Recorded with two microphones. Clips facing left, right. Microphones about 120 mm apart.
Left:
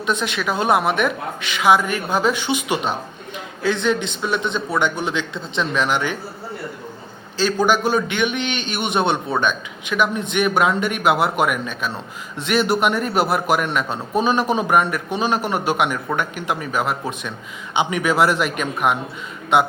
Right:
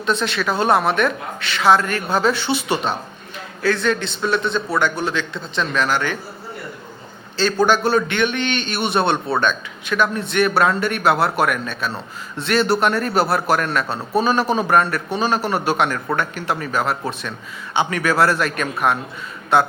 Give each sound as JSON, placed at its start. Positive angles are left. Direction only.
{"t": 0.0, "sound": "a man's voice", "side_deg": 15}
{"t": 7.3, "sound": "a man's voice", "side_deg": 10}